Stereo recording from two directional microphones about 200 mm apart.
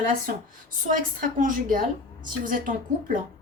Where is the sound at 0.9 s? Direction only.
40° right (ahead or behind).